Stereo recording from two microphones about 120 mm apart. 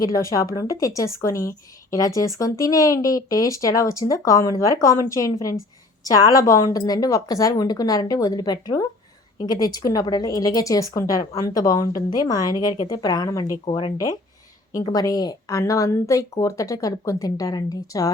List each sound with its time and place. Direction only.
0.0 s a woman's voice: 25° left (ahead or behind)
13.7 s speech: 50° left (ahead or behind)
14.9 s a woman's voice: 30° left (ahead or behind)